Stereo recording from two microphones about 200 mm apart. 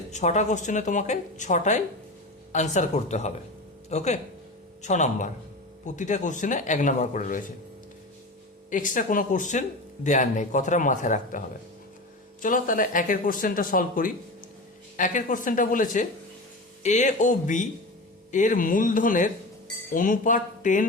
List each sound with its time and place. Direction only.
0.1 s speech: 35° left (ahead or behind)
8.7 s speech: 40° left (ahead or behind)